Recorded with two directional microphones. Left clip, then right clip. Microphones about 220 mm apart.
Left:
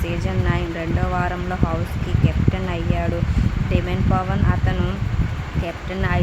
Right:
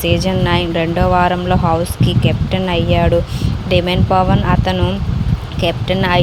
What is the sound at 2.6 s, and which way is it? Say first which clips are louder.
Speech: right 10 dB; 30° right (ahead or behind).